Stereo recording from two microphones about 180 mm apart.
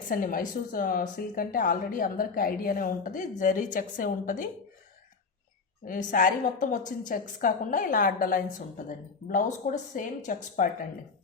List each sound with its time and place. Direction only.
0.1 s a woman's voice: 50° left (ahead or behind)
5.8 s a woman's voice: 50° left (ahead or behind)